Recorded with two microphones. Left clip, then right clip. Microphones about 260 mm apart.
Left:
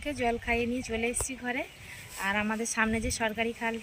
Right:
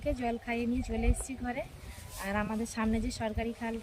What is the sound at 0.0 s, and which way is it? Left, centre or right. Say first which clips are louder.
A woman's voice: left 4 dB; centre.